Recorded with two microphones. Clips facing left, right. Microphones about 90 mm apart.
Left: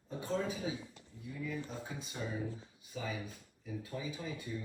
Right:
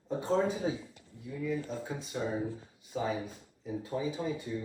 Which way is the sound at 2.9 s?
40° right (ahead or behind).